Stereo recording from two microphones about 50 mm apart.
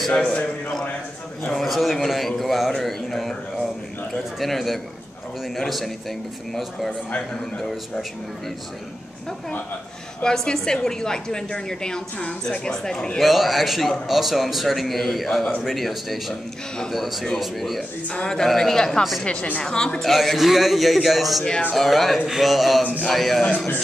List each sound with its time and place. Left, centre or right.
0.1 s a woman's voice: centre
1.5 s a man's voice: centre
4.4 s a man's voice: centre
10.2 s a woman's voice: centre
13.2 s a man's voice: centre
18.0 s a woman's voice: centre
18.4 s a woman's voice: centre
20.1 s a man's voice: centre